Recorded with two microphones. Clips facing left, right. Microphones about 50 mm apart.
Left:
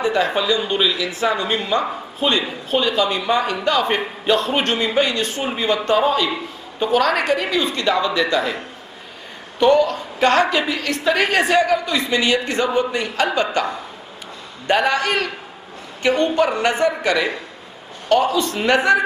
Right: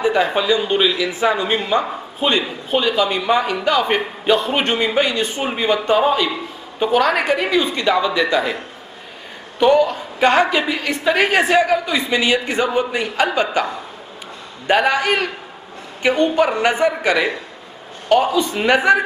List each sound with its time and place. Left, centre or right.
0.0 s a woman's voice: centre
9.6 s a woman's voice: centre
14.7 s a woman's voice: centre